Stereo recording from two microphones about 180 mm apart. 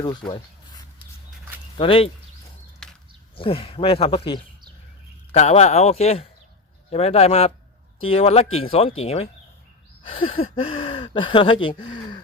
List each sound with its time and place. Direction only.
0.0 s speech: 25° left (ahead or behind)
1.8 s speech: 30° left (ahead or behind)
2.8 s a sound: centre (ahead or behind)
3.3 s speech: 30° left (ahead or behind)